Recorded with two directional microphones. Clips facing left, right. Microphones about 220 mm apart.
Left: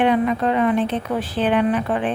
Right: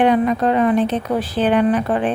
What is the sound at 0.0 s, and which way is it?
A woman's voice, 40° right (ahead or behind).